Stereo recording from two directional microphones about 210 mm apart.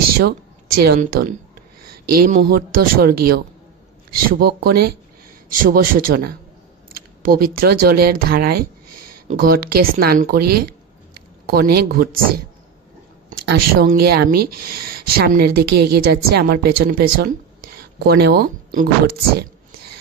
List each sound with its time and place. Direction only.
0.2 s speech: 50° right (ahead or behind)
13.3 s a woman's voice: 45° right (ahead or behind)